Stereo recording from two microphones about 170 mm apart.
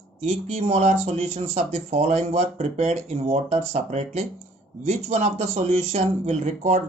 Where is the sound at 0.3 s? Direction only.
40° right (ahead or behind).